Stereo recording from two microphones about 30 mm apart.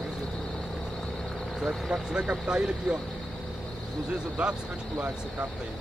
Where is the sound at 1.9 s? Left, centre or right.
Right.